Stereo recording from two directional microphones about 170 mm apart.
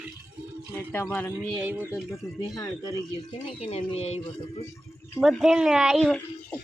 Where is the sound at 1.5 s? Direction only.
10° right (ahead or behind).